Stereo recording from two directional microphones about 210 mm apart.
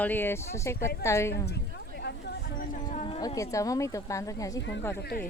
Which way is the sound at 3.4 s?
15° left (ahead or behind).